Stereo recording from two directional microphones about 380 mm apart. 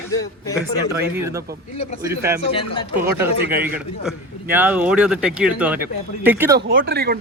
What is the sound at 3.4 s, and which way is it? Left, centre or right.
Speech, right.